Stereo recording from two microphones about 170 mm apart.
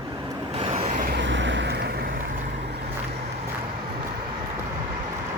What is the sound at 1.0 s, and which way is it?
Vehicle, 90° right.